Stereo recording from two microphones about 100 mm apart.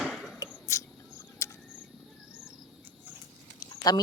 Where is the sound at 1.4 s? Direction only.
30° left (ahead or behind).